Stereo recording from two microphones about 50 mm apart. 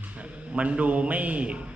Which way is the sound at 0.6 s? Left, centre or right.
Right.